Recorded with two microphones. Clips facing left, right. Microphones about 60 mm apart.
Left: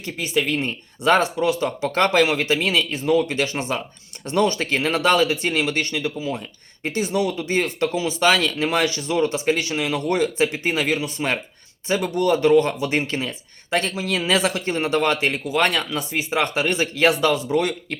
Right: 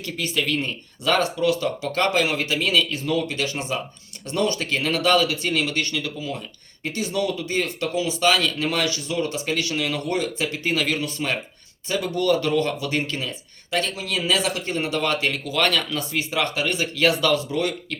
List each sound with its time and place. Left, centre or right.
0.0 s speech: left
11.9 s speech: left